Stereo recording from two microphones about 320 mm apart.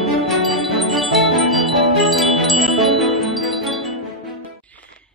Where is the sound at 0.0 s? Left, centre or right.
Centre.